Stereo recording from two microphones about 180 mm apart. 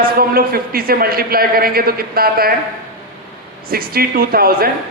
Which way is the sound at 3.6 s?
55° right (ahead or behind).